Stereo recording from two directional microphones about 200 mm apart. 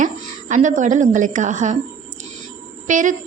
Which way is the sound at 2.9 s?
40° right (ahead or behind).